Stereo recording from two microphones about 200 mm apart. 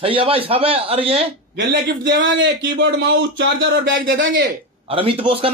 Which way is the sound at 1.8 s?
60° right (ahead or behind).